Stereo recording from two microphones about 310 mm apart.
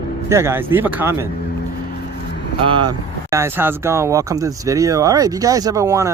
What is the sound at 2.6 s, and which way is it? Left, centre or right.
Speech, centre.